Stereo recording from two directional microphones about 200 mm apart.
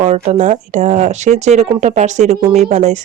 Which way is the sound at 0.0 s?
35° right (ahead or behind).